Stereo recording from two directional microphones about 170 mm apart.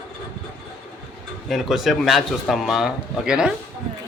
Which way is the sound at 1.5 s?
Centre (ahead or behind).